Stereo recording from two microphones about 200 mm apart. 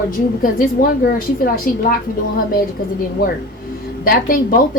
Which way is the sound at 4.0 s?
45° left (ahead or behind).